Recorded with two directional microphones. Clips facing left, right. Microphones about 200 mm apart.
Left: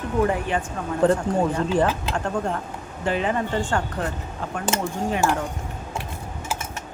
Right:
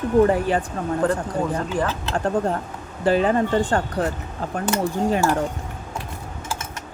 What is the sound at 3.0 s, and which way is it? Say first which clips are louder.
Speech: right 5 dB; 35° right (ahead or behind).